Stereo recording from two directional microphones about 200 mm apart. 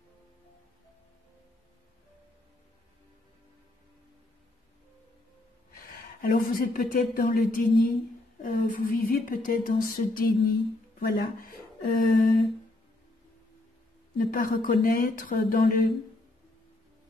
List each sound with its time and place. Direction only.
6.2 s a woman's voice: 45° left (ahead or behind)
14.1 s a woman's voice: 45° left (ahead or behind)